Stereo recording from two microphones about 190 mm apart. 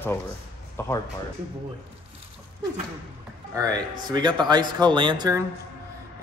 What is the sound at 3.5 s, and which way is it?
Speech, 20° right (ahead or behind).